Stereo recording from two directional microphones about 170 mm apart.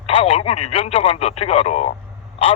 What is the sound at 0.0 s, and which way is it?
A man's voice, 35° left (ahead or behind).